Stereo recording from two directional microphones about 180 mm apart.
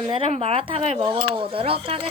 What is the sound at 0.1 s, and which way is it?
Speech, 30° right (ahead or behind).